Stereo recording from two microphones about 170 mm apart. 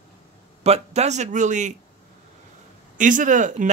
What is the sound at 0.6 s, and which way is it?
Speech, 40° right (ahead or behind).